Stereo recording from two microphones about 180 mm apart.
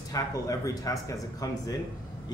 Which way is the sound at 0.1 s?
20° left (ahead or behind).